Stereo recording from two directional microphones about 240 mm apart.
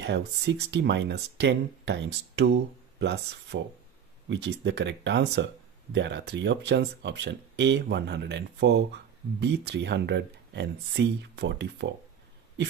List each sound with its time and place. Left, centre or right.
0.0 s speech: right